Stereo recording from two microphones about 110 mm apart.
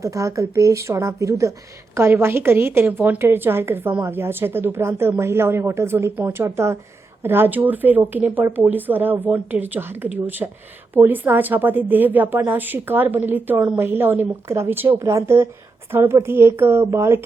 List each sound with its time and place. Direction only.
0.0 s a woman's voice: 30° right (ahead or behind)